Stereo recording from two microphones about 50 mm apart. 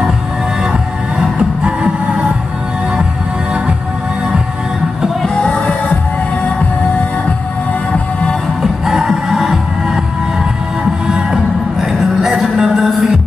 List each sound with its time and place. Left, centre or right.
0.7 s music: centre
5.2 s music: centre
8.8 s music: centre
11.1 s music: right
11.8 s music: centre